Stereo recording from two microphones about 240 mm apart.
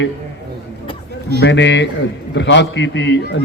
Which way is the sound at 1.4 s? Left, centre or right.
Left.